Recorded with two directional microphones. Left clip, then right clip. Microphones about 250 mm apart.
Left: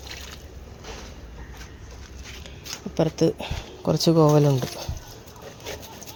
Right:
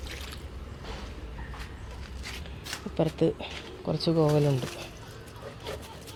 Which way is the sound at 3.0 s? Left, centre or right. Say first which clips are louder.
Left 5 dB; centre.